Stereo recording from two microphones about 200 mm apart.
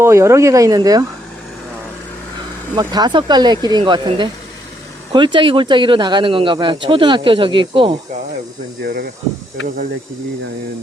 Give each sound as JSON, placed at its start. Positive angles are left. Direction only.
{"t": 0.0, "sound": "speech", "side_deg": -15}
{"t": 2.7, "sound": "speech", "side_deg": -20}
{"t": 8.8, "sound": "speech", "side_deg": -50}